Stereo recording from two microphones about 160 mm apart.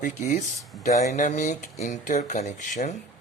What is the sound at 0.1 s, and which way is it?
Speech, 50° left (ahead or behind).